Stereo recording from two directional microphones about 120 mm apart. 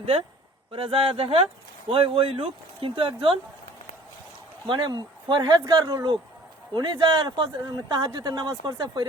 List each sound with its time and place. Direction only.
0.7 s speech: 50° right (ahead or behind)
4.7 s speech: 35° right (ahead or behind)